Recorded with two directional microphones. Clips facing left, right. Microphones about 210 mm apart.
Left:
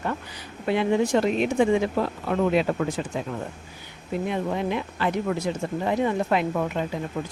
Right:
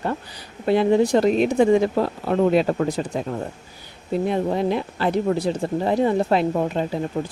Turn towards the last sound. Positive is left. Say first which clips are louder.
# right 4 dB
turn(degrees=-30)  # may be behind; listen again after turning